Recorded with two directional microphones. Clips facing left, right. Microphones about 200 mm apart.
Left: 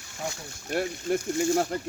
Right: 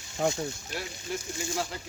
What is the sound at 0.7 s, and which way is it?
Speech, 55° left (ahead or behind).